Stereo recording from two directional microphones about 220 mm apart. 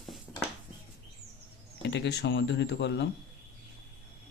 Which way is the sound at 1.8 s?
50° left (ahead or behind).